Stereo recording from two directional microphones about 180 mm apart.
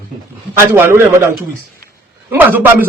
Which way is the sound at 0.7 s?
15° right (ahead or behind).